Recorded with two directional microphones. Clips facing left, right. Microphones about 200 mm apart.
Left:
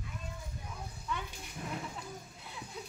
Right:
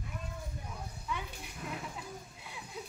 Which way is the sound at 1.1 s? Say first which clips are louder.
Even; 5° right (ahead or behind).